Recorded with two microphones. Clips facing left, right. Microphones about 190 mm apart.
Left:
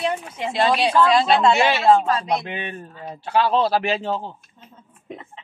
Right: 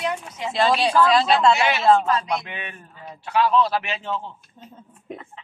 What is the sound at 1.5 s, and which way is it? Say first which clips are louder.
A man's voice: left 2 dB; 30° left (ahead or behind).